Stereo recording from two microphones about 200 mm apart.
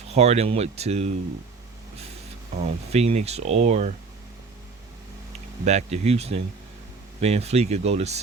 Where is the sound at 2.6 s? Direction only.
35° right (ahead or behind).